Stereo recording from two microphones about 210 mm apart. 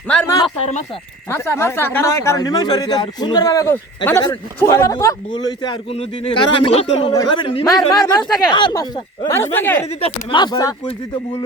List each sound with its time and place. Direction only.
0.1 s speech: 5° left (ahead or behind); by 7.6 s 25° left (ahead or behind)
7.7 s speech: centre (ahead or behind)
8.4 s speech: 20° left (ahead or behind)
9.8 s speech: 30° left (ahead or behind)